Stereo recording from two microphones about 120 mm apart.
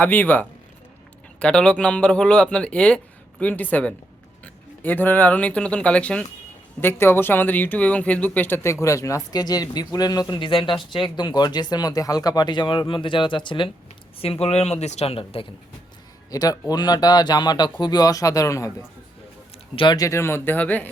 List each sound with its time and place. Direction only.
0.0 s a man's voice: 15° left (ahead or behind); by 13.7 s 40° left (ahead or behind)
14.2 s speech: 55° left (ahead or behind)
16.3 s speech: 30° left (ahead or behind)
19.7 s speech: 45° left (ahead or behind)
20.0 s a man's voice: 25° left (ahead or behind)